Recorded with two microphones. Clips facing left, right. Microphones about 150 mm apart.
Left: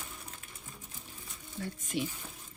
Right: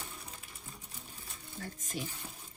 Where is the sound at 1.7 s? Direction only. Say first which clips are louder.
Left 7 dB; 40° right (ahead or behind).